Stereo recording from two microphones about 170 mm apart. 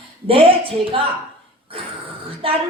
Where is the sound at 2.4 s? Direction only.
35° right (ahead or behind).